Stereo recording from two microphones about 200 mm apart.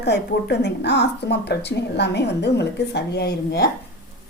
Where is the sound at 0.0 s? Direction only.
55° left (ahead or behind).